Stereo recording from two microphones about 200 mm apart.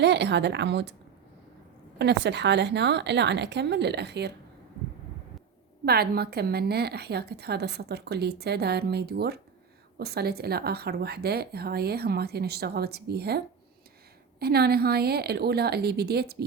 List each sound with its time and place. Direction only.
0.0 s a woman's voice: 60° right (ahead or behind)
2.0 s a woman's voice: 60° right (ahead or behind)
5.8 s a woman's voice: 50° right (ahead or behind)